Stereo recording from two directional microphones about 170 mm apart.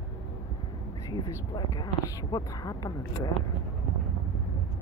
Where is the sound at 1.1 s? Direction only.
25° left (ahead or behind).